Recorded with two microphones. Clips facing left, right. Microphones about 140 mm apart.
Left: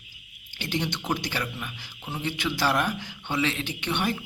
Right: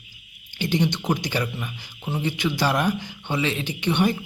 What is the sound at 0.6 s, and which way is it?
Speech, centre (ahead or behind).